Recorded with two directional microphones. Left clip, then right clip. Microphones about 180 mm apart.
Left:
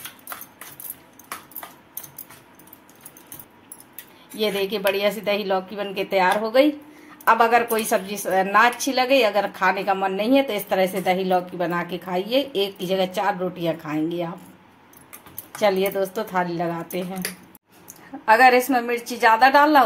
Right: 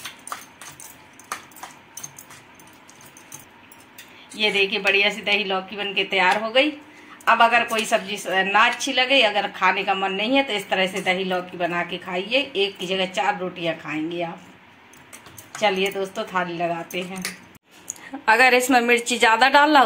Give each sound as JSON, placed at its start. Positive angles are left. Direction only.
{"t": 4.4, "sound": "a woman's voice", "side_deg": 65}
{"t": 15.6, "sound": "a woman's voice", "side_deg": 60}
{"t": 17.8, "sound": "a woman's voice", "side_deg": 5}